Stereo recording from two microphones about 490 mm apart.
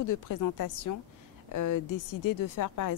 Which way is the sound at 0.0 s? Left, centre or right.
Left.